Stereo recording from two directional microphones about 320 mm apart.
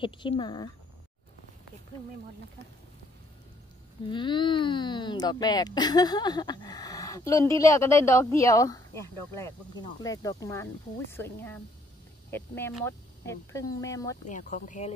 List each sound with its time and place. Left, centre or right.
0.0 s speech: centre
4.1 s speech: centre
14.2 s speech: left